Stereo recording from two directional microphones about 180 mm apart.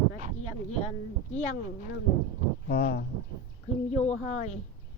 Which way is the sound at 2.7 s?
65° left (ahead or behind).